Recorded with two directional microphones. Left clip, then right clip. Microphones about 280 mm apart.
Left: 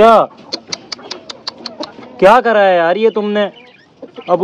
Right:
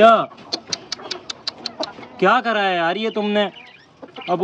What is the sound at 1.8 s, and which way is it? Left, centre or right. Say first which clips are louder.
Music: left 9 dB; centre.